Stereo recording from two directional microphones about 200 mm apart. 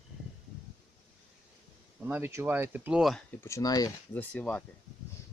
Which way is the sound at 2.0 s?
10° right (ahead or behind).